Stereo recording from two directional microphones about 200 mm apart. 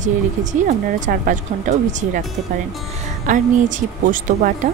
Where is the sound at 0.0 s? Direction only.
40° right (ahead or behind).